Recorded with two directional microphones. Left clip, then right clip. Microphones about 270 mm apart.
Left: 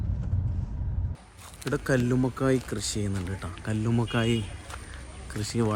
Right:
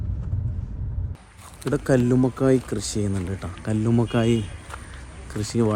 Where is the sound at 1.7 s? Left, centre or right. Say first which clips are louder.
Right 6 dB; centre.